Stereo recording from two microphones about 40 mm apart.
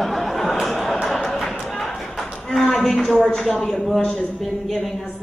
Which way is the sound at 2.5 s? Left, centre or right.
Centre.